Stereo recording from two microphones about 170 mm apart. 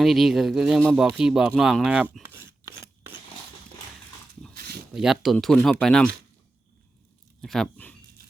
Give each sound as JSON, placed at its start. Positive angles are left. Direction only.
{"t": 0.0, "sound": "speech", "side_deg": 0}
{"t": 4.5, "sound": "a sound", "side_deg": -70}
{"t": 4.9, "sound": "speech", "side_deg": 0}
{"t": 7.4, "sound": "speech", "side_deg": 0}